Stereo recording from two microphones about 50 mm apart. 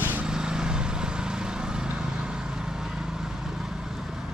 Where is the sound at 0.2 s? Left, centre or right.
Centre.